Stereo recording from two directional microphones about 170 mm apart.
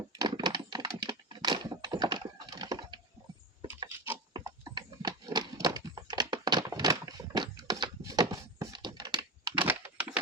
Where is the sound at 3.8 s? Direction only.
15° right (ahead or behind).